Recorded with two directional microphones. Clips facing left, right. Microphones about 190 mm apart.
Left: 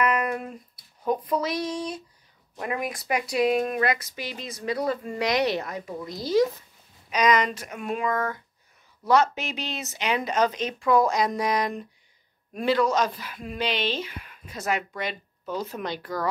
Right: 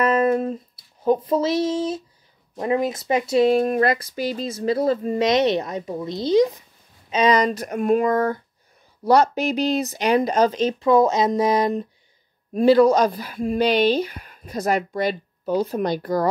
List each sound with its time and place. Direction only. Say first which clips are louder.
0.0 s a sound: right 7 dB; 25° right (ahead or behind)
1.0 s speech: right 6 dB; 25° right (ahead or behind)
7.1 s speech: right 4 dB; 30° right (ahead or behind)